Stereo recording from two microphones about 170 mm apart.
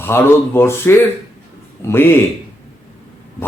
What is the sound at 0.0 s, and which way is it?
A man's voice, 15° left (ahead or behind).